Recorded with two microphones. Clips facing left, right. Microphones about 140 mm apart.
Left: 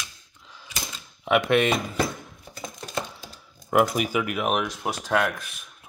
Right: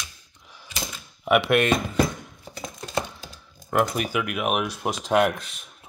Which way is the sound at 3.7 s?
5° left (ahead or behind).